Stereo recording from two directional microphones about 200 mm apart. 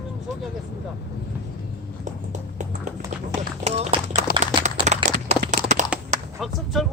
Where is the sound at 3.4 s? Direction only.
35° right (ahead or behind).